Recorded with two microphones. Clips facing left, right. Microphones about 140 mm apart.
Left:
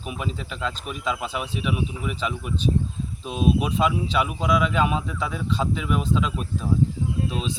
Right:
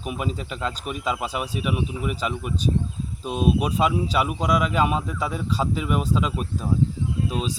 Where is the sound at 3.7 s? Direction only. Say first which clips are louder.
Right 1 dB; 5° right (ahead or behind).